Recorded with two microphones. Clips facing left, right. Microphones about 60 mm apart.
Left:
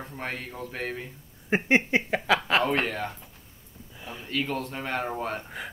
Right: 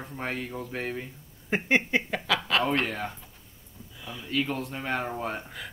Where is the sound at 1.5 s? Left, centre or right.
Centre.